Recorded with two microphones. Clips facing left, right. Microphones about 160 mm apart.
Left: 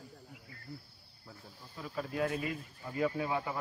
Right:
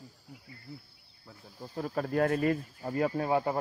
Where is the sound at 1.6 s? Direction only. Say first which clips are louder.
Right 7 dB; 45° right (ahead or behind).